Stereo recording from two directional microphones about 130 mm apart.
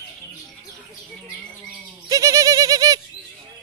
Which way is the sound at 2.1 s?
25° right (ahead or behind).